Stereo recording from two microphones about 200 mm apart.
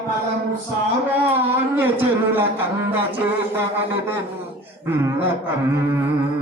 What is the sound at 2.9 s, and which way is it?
A man's voice, 10° right (ahead or behind).